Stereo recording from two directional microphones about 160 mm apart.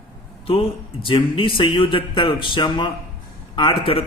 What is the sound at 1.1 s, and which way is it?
Speech, 30° left (ahead or behind).